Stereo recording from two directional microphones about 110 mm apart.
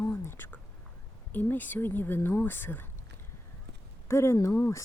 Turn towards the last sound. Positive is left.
turn(degrees=25)  # may be behind; listen again after turning